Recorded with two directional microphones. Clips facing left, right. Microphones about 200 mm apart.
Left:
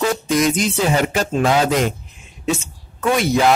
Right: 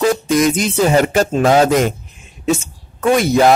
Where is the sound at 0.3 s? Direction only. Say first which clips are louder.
Right 3 dB; 45° right (ahead or behind).